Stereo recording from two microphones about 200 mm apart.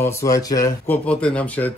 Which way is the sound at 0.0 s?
15° left (ahead or behind).